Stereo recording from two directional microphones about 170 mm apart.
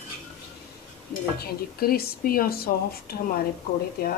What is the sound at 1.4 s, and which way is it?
Speech, 65° left (ahead or behind).